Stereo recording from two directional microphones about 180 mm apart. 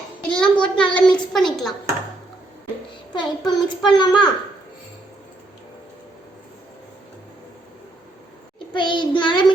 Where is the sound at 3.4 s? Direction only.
25° left (ahead or behind).